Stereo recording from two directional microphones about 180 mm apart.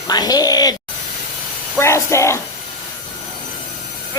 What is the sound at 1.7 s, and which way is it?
Speech, 15° left (ahead or behind).